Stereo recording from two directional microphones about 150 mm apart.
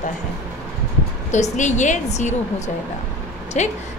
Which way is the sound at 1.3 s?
50° left (ahead or behind).